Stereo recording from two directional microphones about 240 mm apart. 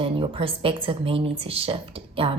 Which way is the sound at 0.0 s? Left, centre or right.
Right.